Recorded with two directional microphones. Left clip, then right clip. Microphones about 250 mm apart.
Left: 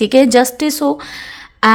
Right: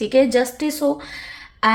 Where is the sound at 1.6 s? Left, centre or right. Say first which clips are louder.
Left 6 dB; left.